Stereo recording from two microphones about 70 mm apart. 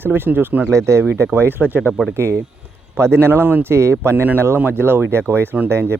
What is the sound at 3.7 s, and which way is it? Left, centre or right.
Speech, right.